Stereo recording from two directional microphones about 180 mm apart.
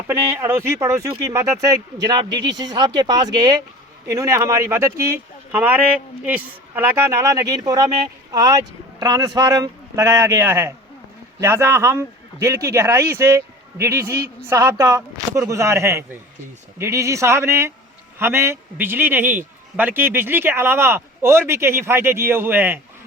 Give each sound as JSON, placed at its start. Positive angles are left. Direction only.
{"t": 0.1, "sound": "speech", "side_deg": -15}